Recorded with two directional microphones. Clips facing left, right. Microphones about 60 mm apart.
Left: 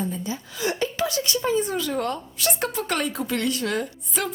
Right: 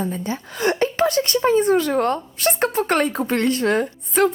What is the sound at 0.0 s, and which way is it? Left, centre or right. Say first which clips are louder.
A woman's voice: right 4 dB; right.